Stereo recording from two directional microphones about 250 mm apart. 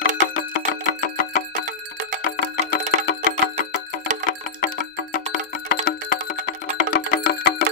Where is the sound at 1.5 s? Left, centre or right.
Right.